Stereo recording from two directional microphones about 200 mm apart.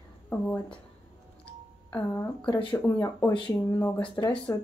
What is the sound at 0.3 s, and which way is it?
Speech, 10° left (ahead or behind).